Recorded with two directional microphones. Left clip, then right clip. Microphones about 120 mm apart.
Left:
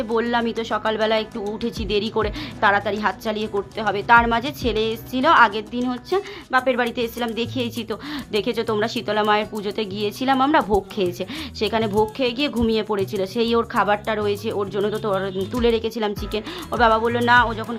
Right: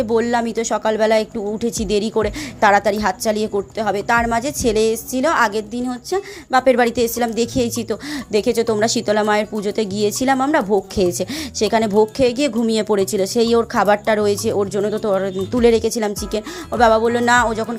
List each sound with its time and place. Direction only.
0.0 s speech: 35° right (ahead or behind)
5.2 s speech: 30° right (ahead or behind)
6.5 s speech: 55° right (ahead or behind)
10.3 s a woman's voice: 25° right (ahead or behind)
10.9 s speech: 45° right (ahead or behind)
14.5 s speech: 35° right (ahead or behind)